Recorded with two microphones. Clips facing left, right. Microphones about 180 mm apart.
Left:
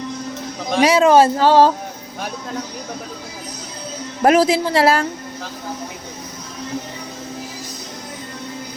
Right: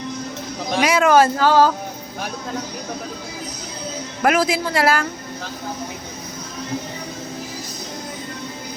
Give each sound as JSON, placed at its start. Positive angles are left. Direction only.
{"t": 0.8, "sound": "speech", "side_deg": 35}
{"t": 4.2, "sound": "speech", "side_deg": 35}